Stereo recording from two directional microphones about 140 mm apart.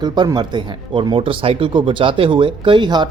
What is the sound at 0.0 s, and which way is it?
Speech, 30° right (ahead or behind).